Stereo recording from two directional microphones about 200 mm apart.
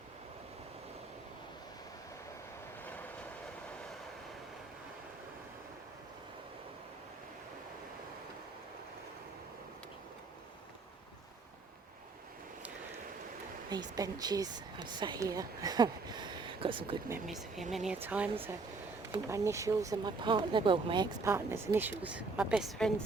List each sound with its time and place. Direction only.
13.7 s speech: 20° right (ahead or behind)
17.2 s speech: centre (ahead or behind)